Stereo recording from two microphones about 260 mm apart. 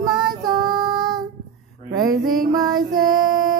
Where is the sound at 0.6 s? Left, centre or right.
Centre.